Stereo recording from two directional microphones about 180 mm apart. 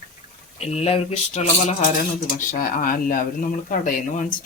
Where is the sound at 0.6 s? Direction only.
35° left (ahead or behind).